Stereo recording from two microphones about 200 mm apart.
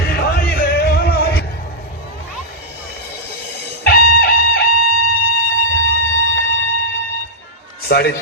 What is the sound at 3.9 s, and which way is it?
Music, 50° left (ahead or behind).